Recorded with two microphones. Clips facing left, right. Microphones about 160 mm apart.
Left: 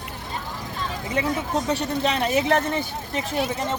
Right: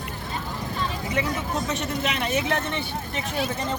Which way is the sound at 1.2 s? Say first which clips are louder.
Left 3 dB; 30° left (ahead or behind).